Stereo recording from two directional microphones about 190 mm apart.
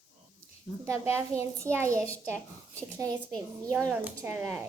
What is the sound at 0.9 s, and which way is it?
A child's voice, 15° right (ahead or behind).